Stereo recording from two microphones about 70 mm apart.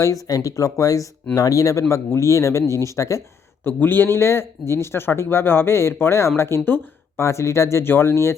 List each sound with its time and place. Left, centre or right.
0.0 s speech: left
3.6 s speech: left